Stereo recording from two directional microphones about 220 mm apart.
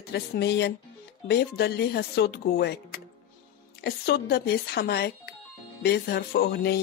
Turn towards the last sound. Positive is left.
turn(degrees=50)  # may be behind; listen again after turning